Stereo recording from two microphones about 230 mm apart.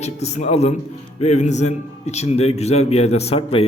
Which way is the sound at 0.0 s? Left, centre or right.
Left.